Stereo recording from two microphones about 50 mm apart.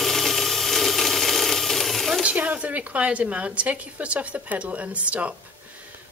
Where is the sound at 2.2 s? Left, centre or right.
Right.